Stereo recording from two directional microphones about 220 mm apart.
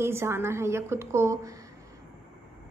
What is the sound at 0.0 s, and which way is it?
A woman's voice, 10° right (ahead or behind).